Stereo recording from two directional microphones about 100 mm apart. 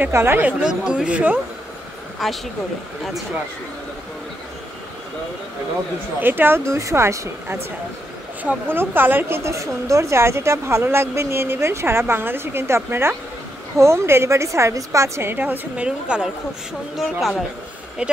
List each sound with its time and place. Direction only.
0.0 s a woman's voice: 20° right (ahead or behind)
2.2 s speech: centre (ahead or behind)
6.2 s a woman's voice: 20° right (ahead or behind)
18.0 s a woman's voice: 10° right (ahead or behind)